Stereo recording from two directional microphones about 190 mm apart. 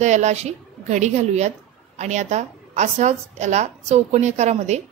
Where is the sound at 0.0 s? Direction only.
35° right (ahead or behind).